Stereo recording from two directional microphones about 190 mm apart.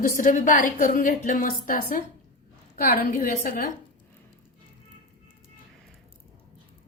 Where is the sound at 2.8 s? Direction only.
50° left (ahead or behind).